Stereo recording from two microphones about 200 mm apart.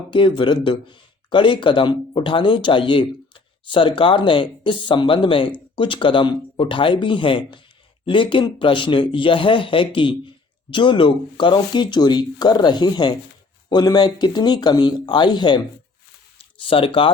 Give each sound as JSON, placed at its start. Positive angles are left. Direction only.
{"t": 0.1, "sound": "speech", "side_deg": 25}
{"t": 16.6, "sound": "speech", "side_deg": 25}